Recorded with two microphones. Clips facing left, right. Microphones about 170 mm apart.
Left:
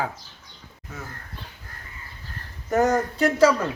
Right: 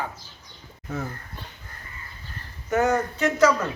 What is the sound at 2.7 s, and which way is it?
Speech, 35° left (ahead or behind).